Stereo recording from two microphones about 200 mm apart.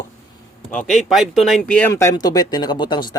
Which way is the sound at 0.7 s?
5° left (ahead or behind).